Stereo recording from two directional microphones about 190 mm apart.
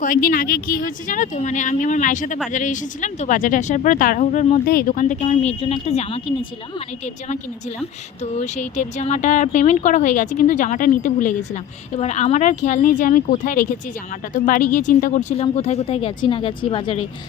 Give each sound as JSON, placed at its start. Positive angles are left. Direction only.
{"t": 0.0, "sound": "speech", "side_deg": 45}